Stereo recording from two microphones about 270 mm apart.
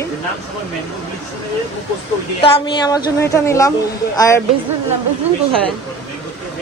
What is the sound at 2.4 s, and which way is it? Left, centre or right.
Speech, left.